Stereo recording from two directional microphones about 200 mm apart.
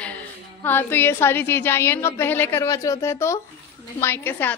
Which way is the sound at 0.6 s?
10° left (ahead or behind).